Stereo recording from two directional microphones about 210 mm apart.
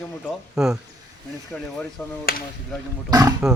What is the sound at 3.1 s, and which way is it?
Speech, 20° right (ahead or behind).